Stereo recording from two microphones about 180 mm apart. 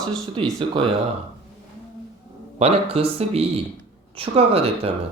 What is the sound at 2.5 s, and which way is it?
Speech, 35° right (ahead or behind).